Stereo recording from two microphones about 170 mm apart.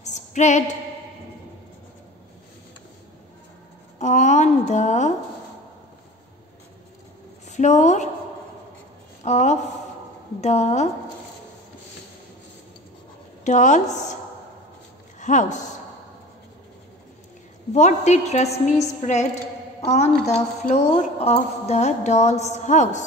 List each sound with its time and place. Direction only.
0.0 s a sound: 45° left (ahead or behind)
4.0 s a woman's voice: 45° left (ahead or behind)
7.4 s speech: 45° left (ahead or behind)
9.2 s speech: 40° left (ahead or behind)
13.4 s a woman's voice: 45° left (ahead or behind)
15.1 s a woman's voice: 45° left (ahead or behind)
17.7 s a woman's voice: 40° left (ahead or behind)